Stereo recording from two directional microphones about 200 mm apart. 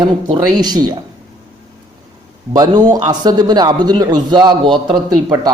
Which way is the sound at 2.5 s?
20° right (ahead or behind).